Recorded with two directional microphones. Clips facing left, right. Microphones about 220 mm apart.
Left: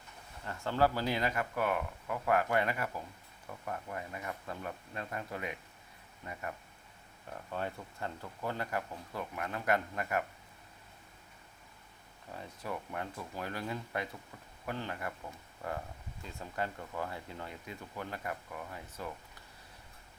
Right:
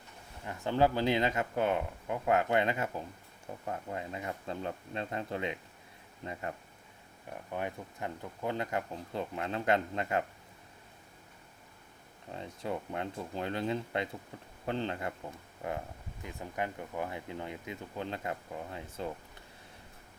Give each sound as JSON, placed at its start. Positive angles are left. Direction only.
{"t": 0.4, "sound": "speech", "side_deg": -15}
{"t": 7.5, "sound": "speech", "side_deg": -15}
{"t": 12.3, "sound": "speech", "side_deg": -25}